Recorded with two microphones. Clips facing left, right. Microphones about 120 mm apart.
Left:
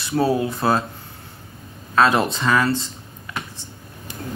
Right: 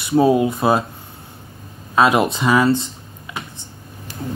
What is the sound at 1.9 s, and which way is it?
Speech, 15° right (ahead or behind).